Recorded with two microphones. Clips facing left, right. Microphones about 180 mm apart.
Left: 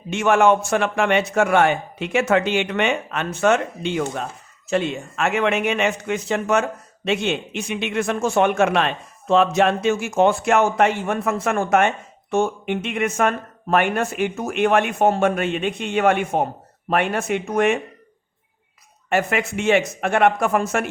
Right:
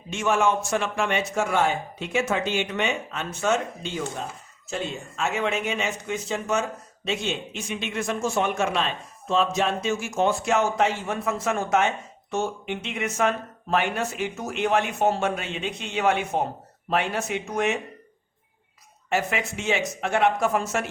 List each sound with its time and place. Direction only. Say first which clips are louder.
0.1 s a man's voice: left 6 dB; 65° left (ahead or behind)
19.1 s speech: left 5 dB; 60° left (ahead or behind)